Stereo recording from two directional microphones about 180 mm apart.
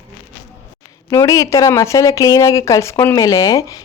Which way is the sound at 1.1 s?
15° left (ahead or behind).